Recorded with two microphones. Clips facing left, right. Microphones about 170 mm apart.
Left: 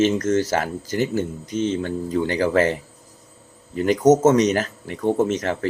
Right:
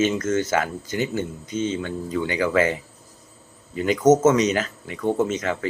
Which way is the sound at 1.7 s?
40° left (ahead or behind).